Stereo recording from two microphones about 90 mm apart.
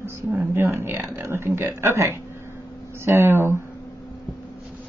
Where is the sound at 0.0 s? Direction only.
25° right (ahead or behind).